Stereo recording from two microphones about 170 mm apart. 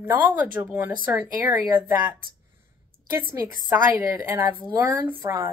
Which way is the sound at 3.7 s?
15° right (ahead or behind).